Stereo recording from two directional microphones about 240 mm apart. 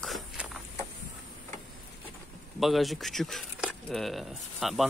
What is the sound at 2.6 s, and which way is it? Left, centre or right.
Speech, centre.